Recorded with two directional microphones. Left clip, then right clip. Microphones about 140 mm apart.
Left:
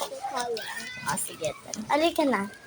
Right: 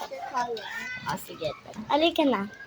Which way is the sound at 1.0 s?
10° right (ahead or behind).